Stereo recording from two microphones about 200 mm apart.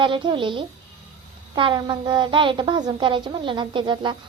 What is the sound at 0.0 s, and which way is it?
A woman's voice, 25° right (ahead or behind).